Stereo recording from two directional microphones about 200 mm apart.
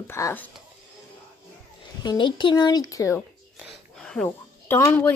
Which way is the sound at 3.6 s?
Centre (ahead or behind).